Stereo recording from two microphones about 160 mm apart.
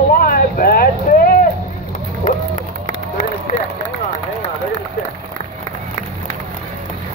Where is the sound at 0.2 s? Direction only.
65° left (ahead or behind).